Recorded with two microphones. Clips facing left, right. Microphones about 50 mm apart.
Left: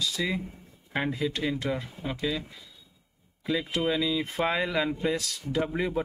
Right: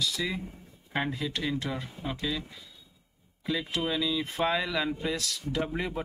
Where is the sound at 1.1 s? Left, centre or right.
Left.